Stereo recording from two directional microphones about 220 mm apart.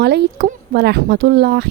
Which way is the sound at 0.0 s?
50° right (ahead or behind).